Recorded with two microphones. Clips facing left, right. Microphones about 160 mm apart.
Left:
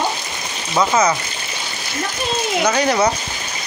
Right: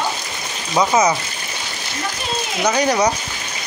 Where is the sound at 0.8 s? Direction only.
15° right (ahead or behind).